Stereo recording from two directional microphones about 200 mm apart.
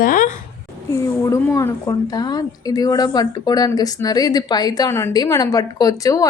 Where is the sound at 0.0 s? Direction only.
40° left (ahead or behind).